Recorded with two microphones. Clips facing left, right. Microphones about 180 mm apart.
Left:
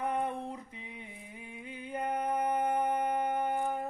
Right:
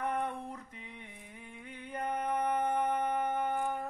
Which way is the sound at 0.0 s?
10° left (ahead or behind).